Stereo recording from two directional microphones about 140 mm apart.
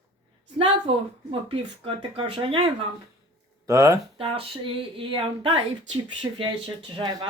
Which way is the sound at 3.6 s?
25° right (ahead or behind).